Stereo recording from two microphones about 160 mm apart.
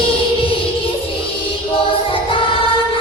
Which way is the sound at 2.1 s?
35° left (ahead or behind).